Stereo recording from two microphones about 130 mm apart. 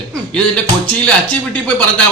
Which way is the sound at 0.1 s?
10° left (ahead or behind).